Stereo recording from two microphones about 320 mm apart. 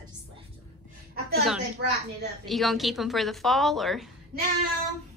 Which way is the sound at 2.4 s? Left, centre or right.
Centre.